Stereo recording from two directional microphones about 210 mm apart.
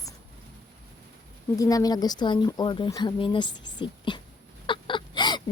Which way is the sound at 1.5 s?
15° left (ahead or behind).